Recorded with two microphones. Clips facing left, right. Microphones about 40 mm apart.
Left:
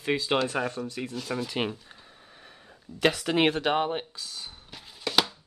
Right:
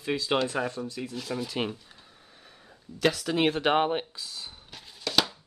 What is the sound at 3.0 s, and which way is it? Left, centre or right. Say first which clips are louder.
Speech: left 2 dB; left.